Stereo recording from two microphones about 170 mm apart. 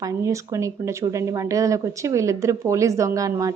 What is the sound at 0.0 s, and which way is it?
A woman's voice, 20° right (ahead or behind).